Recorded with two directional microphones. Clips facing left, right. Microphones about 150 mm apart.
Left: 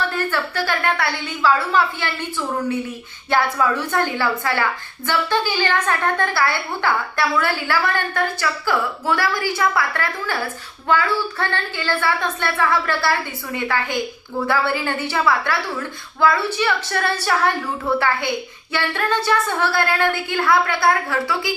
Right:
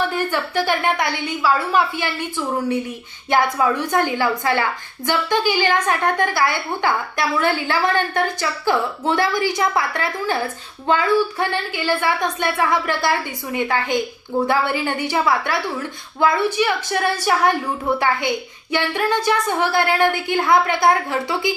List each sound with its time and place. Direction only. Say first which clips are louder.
0.1 s a woman's voice: right 1 dB; 15° right (ahead or behind)
3.2 s a woman's voice: right 1 dB; 15° right (ahead or behind)
18.7 s a woman's voice: right 2 dB; 15° right (ahead or behind)